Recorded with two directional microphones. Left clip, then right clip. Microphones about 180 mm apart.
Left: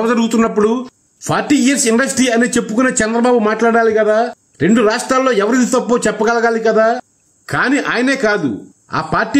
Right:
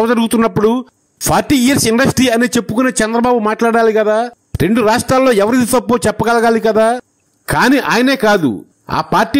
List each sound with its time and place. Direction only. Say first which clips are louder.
0.0 s a man's voice: right 2 dB; 45° right (ahead or behind)